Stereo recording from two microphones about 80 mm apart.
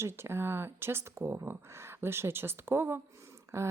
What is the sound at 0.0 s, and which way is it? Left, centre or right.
Speech, right.